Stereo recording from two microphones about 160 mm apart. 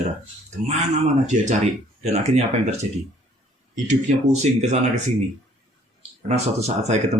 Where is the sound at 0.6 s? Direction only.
45° right (ahead or behind).